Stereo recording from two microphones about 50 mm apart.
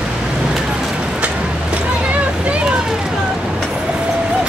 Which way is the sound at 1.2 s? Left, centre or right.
Right.